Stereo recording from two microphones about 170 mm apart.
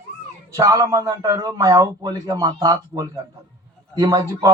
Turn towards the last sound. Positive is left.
turn(degrees=-20)  # may be behind; listen again after turning